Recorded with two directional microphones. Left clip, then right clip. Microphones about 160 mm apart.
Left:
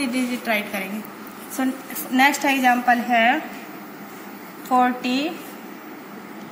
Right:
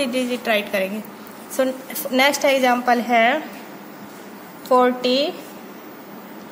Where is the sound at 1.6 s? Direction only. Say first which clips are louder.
Right 5 dB; 90° right.